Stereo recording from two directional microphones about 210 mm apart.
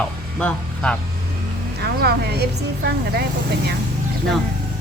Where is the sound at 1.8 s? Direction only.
50° right (ahead or behind).